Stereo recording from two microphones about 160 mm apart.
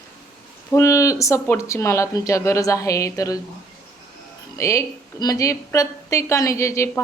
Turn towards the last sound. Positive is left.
turn(degrees=20)  # may be behind; listen again after turning